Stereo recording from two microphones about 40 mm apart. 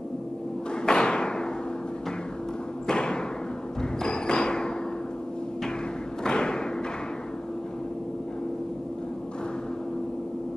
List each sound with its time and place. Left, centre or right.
0.8 s thump: left
2.9 s thump: left
6.2 s thump: left